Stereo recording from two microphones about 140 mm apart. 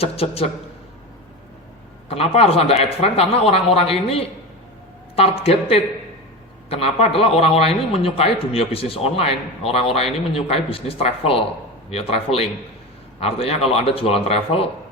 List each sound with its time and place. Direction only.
0.0 s a man's voice: 45° left (ahead or behind)
2.0 s a man's voice: 45° left (ahead or behind)